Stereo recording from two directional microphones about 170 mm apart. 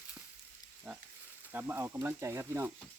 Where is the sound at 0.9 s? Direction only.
Centre (ahead or behind).